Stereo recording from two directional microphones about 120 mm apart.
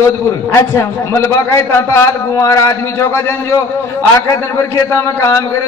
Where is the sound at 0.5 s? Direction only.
25° left (ahead or behind).